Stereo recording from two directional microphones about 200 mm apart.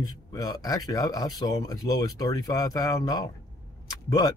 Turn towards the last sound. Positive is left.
turn(degrees=20)  # may be behind; listen again after turning